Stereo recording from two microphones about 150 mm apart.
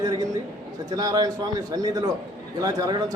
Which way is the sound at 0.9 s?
25° right (ahead or behind).